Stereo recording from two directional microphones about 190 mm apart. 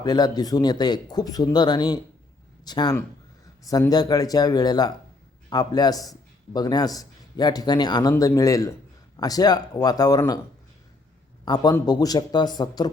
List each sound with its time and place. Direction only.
0.0 s a man's voice: 20° left (ahead or behind)
11.4 s a man's voice: 20° left (ahead or behind)